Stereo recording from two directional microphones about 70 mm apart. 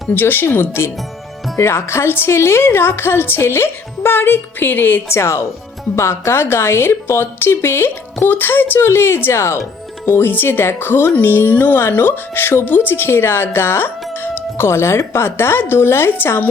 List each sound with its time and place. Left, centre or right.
0.1 s speech: left
5.0 s speech: left